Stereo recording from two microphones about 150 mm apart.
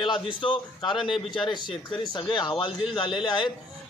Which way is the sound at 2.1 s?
30° left (ahead or behind).